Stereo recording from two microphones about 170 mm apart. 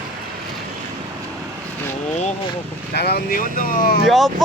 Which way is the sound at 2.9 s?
65° left (ahead or behind).